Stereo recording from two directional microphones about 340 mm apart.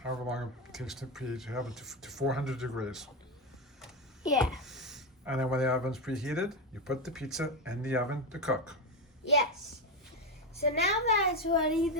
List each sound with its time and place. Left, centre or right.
0.0 s speech: centre
4.4 s speech: centre
10.6 s a woman's voice: left
11.7 s speech: centre